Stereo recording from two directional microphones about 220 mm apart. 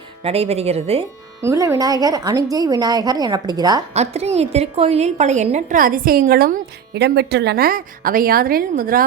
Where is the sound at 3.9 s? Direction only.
30° right (ahead or behind).